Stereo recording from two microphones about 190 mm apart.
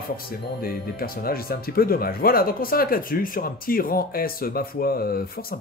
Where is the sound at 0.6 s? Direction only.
50° left (ahead or behind).